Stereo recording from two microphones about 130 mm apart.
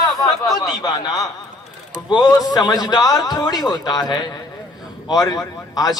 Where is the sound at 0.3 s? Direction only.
Centre (ahead or behind).